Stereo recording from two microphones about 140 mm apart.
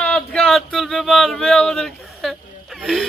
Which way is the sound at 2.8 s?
Centre (ahead or behind).